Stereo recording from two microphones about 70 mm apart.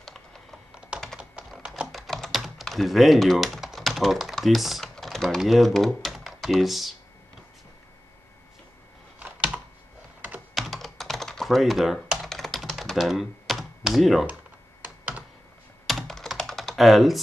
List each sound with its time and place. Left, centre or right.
0.0 s computer keyboard: centre
0.7 s computer keyboard: centre
1.5 s typing: centre
9.2 s computer keyboard: centre
10.5 s computer keyboard: centre
14.8 s computer keyboard: right
15.9 s computer keyboard: centre